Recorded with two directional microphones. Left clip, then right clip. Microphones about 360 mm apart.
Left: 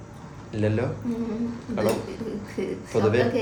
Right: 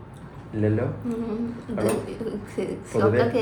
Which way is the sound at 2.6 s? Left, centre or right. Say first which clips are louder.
Right 1 dB; centre.